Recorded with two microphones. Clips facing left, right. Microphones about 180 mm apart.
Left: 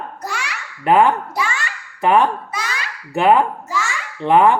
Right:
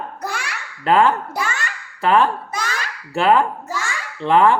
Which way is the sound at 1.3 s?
45° right (ahead or behind).